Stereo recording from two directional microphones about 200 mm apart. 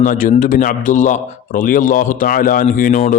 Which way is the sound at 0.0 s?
40° left (ahead or behind).